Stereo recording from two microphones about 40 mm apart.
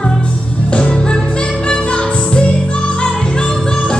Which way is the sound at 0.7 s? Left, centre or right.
Left.